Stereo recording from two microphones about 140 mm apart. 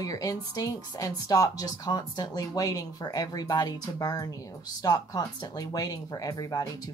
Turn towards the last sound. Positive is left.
turn(degrees=25)  # may be behind; listen again after turning